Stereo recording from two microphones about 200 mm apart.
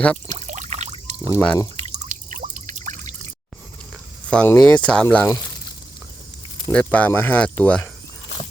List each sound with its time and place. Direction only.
0.3 s pour: 40° right (ahead or behind)
1.2 s speech: 15° left (ahead or behind)
2.0 s a sound: 40° right (ahead or behind)
4.3 s speech: 10° left (ahead or behind)
6.7 s speech: 5° left (ahead or behind)